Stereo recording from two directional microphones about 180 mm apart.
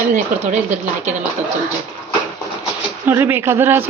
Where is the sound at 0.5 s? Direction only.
40° right (ahead or behind).